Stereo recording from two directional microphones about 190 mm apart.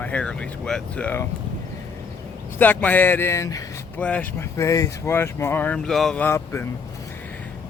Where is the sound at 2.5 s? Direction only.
10° left (ahead or behind).